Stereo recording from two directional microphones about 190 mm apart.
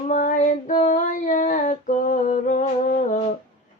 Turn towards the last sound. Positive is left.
turn(degrees=40)  # may be behind; listen again after turning